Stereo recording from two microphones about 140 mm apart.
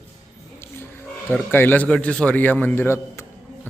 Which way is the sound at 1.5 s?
15° left (ahead or behind).